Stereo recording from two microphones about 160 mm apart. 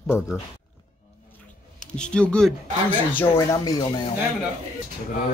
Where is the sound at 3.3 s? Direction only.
25° left (ahead or behind).